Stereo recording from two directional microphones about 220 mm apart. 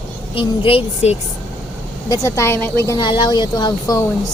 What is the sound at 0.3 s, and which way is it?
Speech, 25° left (ahead or behind).